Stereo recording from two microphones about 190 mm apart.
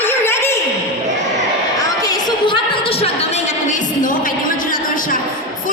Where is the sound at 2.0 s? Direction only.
20° left (ahead or behind).